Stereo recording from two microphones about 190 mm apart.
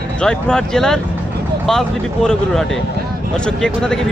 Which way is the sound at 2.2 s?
Centre (ahead or behind).